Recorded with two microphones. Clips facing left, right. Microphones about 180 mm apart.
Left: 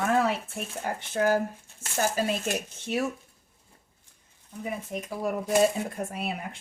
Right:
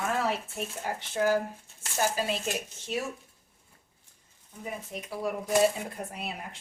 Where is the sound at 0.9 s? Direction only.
50° left (ahead or behind).